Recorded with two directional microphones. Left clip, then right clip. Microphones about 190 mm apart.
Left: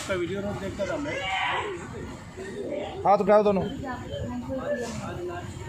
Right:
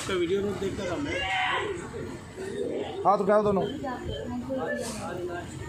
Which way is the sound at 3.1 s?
25° left (ahead or behind).